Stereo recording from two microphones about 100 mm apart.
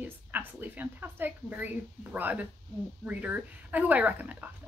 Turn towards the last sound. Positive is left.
turn(degrees=-15)  # may be behind; listen again after turning